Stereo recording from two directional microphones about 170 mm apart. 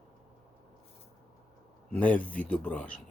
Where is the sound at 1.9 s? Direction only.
10° left (ahead or behind).